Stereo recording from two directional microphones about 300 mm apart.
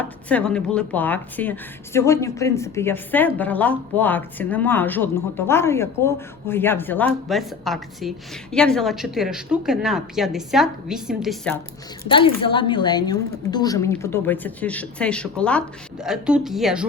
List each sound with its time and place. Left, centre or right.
0.0 s speech: centre
12.0 s speech: centre